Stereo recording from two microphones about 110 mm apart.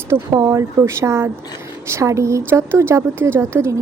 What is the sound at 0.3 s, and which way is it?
Speech, 30° right (ahead or behind).